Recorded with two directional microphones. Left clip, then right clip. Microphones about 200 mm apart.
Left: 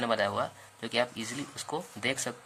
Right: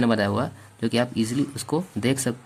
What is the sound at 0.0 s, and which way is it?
Speech, 20° right (ahead or behind).